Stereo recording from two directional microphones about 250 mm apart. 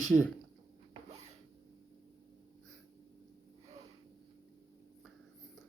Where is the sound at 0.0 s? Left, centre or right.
Centre.